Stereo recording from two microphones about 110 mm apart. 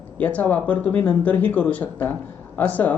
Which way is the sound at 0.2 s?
15° left (ahead or behind).